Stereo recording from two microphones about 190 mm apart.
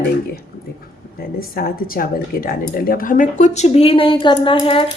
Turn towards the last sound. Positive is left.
turn(degrees=30)  # may be behind; listen again after turning